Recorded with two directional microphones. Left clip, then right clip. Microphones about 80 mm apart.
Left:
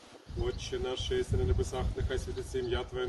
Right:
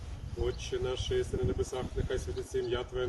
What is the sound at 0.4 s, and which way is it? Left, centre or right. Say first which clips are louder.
Speech: right 1 dB; left.